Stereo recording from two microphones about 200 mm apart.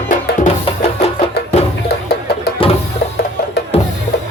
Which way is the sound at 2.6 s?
25° left (ahead or behind).